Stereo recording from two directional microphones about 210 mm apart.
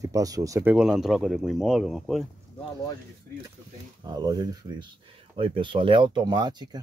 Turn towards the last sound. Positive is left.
turn(degrees=-20)  # may be behind; listen again after turning